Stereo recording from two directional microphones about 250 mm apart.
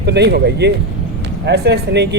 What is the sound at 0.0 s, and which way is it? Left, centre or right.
Speech, right.